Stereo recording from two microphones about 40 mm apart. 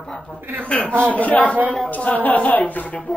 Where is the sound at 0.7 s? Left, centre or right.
Left.